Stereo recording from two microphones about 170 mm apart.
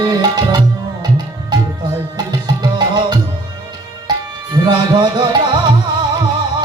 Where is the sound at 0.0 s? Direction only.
25° right (ahead or behind).